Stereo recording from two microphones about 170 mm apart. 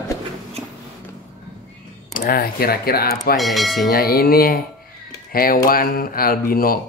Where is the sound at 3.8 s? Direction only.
60° left (ahead or behind).